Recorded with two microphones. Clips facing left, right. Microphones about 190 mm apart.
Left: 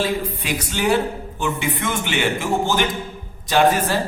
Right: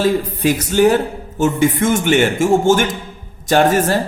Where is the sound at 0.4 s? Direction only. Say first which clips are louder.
Right 10 dB; 45° right (ahead or behind).